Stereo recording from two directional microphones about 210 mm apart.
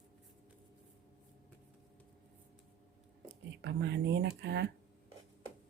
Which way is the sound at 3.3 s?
55° right (ahead or behind).